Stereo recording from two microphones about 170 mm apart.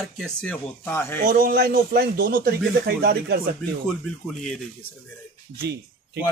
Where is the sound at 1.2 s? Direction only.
55° right (ahead or behind).